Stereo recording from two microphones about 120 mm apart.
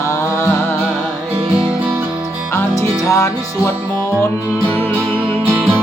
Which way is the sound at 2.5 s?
25° left (ahead or behind).